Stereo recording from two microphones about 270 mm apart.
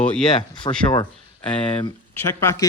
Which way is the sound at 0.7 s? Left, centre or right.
Centre.